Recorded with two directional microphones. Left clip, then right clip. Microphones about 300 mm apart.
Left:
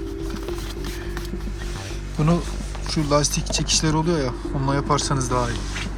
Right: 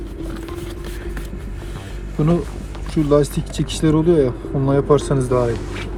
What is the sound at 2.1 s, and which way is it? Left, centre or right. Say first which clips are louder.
Speech: right 4 dB; centre.